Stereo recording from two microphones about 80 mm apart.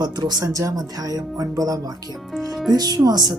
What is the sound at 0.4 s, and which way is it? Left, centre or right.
Speech, right.